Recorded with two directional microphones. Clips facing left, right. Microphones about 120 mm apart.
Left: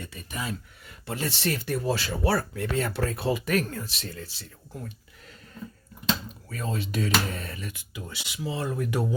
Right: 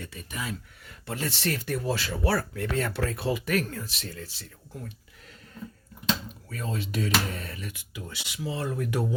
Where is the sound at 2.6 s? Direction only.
10° left (ahead or behind).